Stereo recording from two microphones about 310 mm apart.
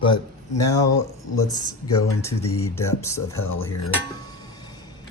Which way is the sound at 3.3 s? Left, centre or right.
Left.